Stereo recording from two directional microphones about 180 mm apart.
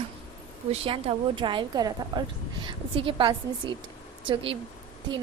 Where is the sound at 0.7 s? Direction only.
30° right (ahead or behind).